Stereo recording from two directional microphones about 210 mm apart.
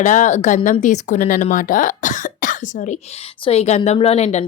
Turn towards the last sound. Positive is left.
turn(degrees=30)  # may be behind; listen again after turning